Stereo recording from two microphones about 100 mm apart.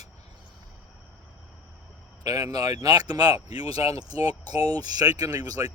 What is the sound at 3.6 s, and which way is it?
Speech, 80° left.